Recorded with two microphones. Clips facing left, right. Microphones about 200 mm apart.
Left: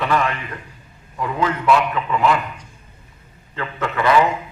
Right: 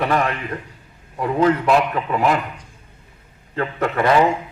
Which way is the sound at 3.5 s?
40° right (ahead or behind).